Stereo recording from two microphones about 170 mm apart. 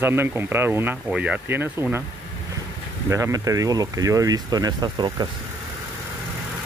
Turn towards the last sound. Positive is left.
turn(degrees=-25)  # may be behind; listen again after turning